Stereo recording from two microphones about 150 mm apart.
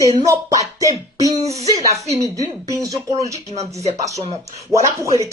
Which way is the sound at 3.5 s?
45° right (ahead or behind).